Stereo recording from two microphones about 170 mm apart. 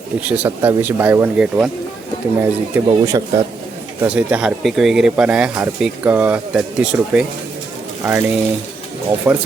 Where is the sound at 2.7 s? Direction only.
20° right (ahead or behind).